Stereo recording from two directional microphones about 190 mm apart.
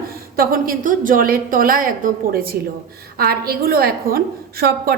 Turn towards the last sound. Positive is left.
turn(degrees=-50)  # may be behind; listen again after turning